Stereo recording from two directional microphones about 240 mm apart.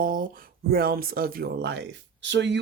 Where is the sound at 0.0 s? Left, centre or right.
Right.